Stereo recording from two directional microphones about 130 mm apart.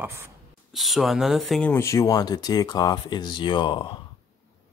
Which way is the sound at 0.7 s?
Centre (ahead or behind).